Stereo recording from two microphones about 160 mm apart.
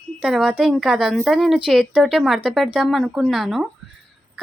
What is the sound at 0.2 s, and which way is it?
A woman's voice, 5° right (ahead or behind).